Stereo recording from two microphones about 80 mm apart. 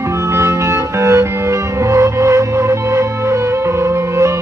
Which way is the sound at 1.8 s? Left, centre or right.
Right.